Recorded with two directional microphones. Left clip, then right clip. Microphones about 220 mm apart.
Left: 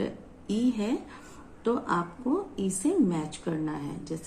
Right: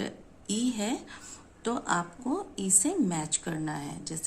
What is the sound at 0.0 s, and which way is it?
A woman's voice, 40° right (ahead or behind).